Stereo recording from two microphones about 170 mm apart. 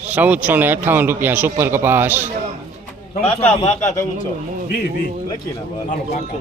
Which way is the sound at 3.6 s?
40° left (ahead or behind).